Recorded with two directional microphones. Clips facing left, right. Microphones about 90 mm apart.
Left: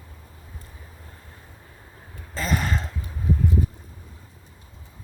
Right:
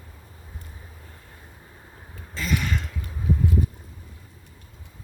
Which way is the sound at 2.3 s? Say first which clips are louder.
Left 1 dB; 35° left (ahead or behind).